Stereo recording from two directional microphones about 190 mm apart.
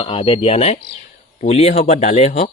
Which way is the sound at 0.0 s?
30° left (ahead or behind).